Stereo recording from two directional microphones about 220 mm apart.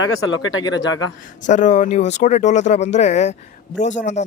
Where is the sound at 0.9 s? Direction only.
65° left (ahead or behind).